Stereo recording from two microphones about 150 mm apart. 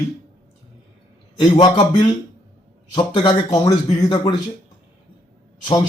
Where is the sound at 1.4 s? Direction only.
35° left (ahead or behind).